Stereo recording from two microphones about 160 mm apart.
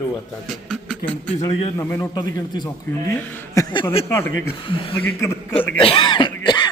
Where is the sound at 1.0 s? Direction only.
35° left (ahead or behind).